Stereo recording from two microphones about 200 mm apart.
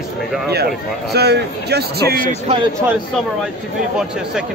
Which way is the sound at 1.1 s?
55° right (ahead or behind).